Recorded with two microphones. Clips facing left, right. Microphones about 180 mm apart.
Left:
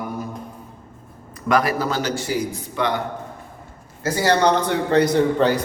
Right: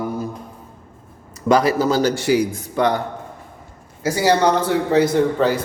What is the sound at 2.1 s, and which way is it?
Speech, 75° right (ahead or behind).